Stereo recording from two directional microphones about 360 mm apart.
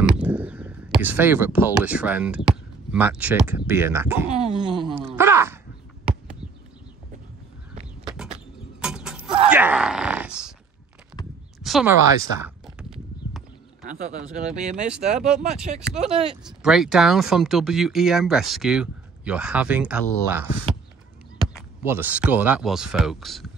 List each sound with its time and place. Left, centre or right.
0.0 s speech: centre
4.3 s a sound: centre
4.8 s groan: centre
8.1 s a sound: centre
8.8 s music: centre
9.5 s a sound: centre
11.6 s a sound: centre
12.4 s horse: centre
13.8 s speech: right
14.9 s speech: centre
16.0 s speech: centre
16.4 s speech: centre
21.5 s speech: centre